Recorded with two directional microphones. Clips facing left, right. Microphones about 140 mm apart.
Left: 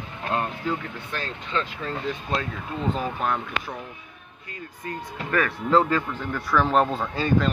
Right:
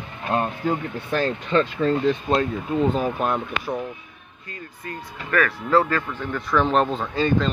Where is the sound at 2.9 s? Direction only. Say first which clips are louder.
Right 4 dB; 15° right (ahead or behind).